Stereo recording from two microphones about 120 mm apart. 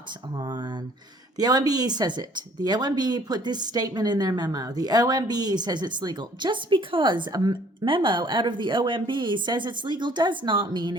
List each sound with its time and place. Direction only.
0.3 s speech: 40° right (ahead or behind)